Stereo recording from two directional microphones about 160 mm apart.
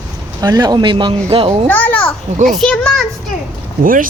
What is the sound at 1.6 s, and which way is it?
Speech, 10° left (ahead or behind).